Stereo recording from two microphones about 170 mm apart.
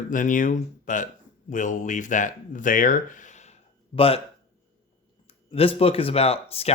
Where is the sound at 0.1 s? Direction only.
50° left (ahead or behind); by 4.2 s 35° left (ahead or behind).